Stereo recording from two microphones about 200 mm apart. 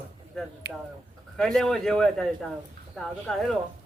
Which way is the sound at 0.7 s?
55° right (ahead or behind).